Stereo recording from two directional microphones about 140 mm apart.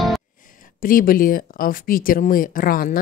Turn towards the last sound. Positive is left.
turn(degrees=90)